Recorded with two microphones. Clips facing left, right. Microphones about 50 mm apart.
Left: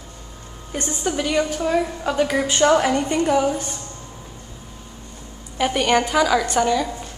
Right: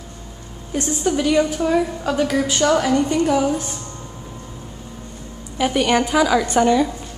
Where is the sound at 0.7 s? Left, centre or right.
Centre.